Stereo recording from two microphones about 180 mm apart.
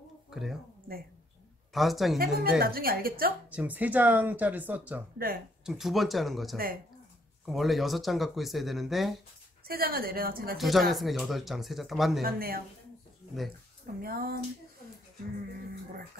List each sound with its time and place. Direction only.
0.3 s speech: centre (ahead or behind)
1.7 s a woman's voice: centre (ahead or behind)
2.1 s speech: 55° right (ahead or behind)
3.4 s speech: 10° right (ahead or behind)
9.7 s speech: 55° right (ahead or behind)
10.6 s speech: centre (ahead or behind)
12.2 s speech: 55° right (ahead or behind)
14.0 s speech: 55° right (ahead or behind)